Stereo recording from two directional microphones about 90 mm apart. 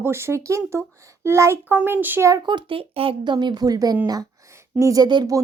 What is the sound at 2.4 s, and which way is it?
A woman's voice, 70° right (ahead or behind).